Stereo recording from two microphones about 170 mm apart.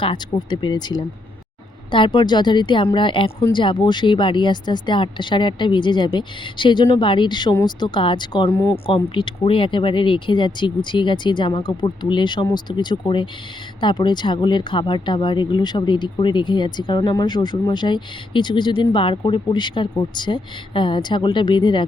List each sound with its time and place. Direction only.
0.0 s speech: 25° left (ahead or behind)
8.7 s speech: 30° left (ahead or behind)